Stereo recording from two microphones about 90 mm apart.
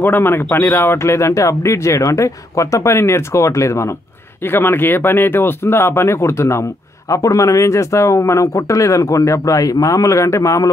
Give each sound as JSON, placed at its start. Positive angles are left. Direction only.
{"t": 0.0, "sound": "speech", "side_deg": 25}